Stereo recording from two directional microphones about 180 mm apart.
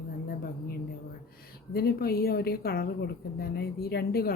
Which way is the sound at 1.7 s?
60° left (ahead or behind).